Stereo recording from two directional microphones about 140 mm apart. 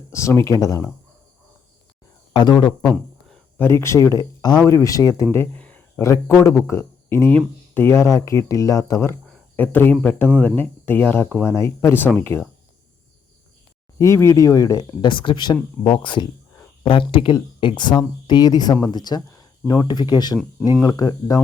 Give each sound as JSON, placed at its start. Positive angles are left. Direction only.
{"t": 0.1, "sound": "speech", "side_deg": 20}
{"t": 2.3, "sound": "speech", "side_deg": 30}
{"t": 3.6, "sound": "speech", "side_deg": 20}
{"t": 5.3, "sound": "a sound", "side_deg": 15}
{"t": 6.0, "sound": "speech", "side_deg": 20}
{"t": 14.0, "sound": "speech", "side_deg": 20}